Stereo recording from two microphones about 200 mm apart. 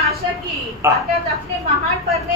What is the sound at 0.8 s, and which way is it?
Speech, 15° right (ahead or behind).